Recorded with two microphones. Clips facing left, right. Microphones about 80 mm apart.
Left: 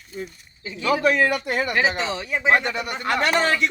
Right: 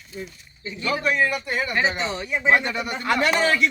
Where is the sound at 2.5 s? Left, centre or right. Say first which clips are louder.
Even; left.